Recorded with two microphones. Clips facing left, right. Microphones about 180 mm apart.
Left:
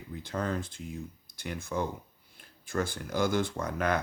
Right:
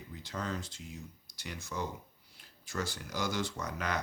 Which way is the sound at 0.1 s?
55° left (ahead or behind).